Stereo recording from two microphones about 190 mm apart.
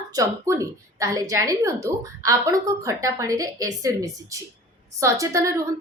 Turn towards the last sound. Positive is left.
turn(degrees=-15)  # may be behind; listen again after turning